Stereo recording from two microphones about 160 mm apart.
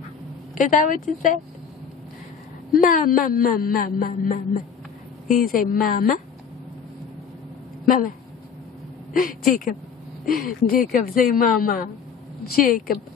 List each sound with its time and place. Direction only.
0.6 s a man's voice: 55° left (ahead or behind)
2.7 s a man's voice: 60° left (ahead or behind)
7.8 s speech: 60° left (ahead or behind)
10.3 s a man's voice: 60° left (ahead or behind)